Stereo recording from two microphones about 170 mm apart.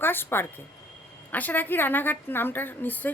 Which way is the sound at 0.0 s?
10° left (ahead or behind).